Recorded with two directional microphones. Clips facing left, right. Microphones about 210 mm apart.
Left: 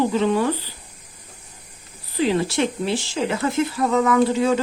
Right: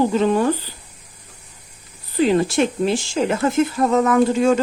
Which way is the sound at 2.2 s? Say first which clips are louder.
Right 4 dB; 45° right (ahead or behind).